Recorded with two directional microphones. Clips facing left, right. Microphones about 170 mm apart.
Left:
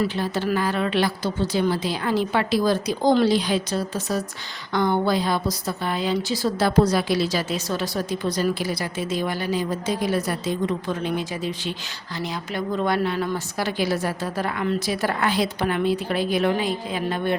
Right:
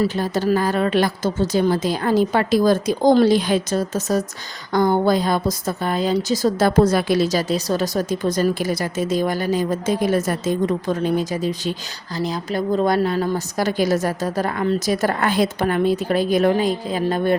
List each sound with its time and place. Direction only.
0.0 s a woman's voice: 35° right (ahead or behind)